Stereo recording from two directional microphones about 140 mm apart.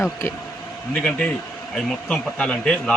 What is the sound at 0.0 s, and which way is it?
A man's voice, 15° left (ahead or behind).